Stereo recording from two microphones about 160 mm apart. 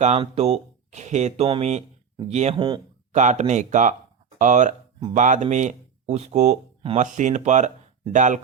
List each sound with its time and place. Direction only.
0.0 s speech: 40° right (ahead or behind)
2.6 s speech: 25° right (ahead or behind)
3.1 s speech: 50° right (ahead or behind)
4.4 s a sound: 50° right (ahead or behind)
5.1 s speech: 50° right (ahead or behind)